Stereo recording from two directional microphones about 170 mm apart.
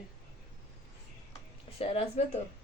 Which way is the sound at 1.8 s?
35° left (ahead or behind).